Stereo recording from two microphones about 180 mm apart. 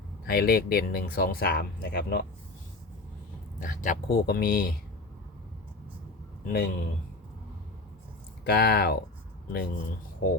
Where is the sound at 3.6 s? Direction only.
50° left (ahead or behind).